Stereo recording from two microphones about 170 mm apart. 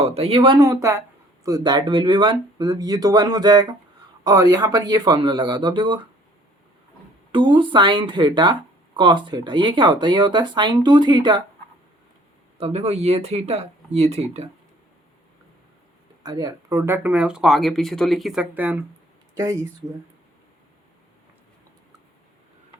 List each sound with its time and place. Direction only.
0.0 s speech: 35° right (ahead or behind)
7.3 s speech: 30° right (ahead or behind)
12.5 s speech: 35° right (ahead or behind)
16.2 s speech: 25° right (ahead or behind)